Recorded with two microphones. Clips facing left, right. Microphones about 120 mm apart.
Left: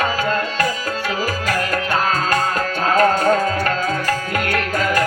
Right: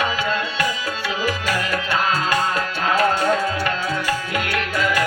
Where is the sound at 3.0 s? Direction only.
40° left (ahead or behind).